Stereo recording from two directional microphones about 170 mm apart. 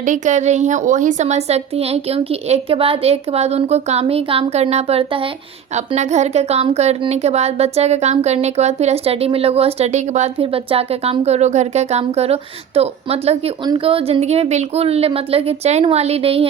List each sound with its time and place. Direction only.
0.0 s a woman's voice: 45° right (ahead or behind)